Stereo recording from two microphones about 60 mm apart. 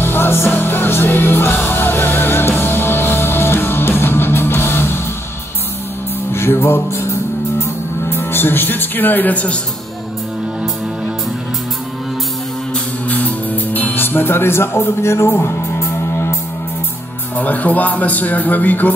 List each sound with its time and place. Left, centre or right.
0.0 s music: left
6.3 s music: left
13.1 s music: left
17.4 s a man's voice: left